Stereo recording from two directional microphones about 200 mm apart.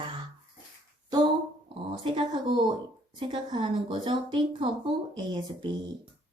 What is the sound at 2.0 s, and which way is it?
Speech, 25° right (ahead or behind).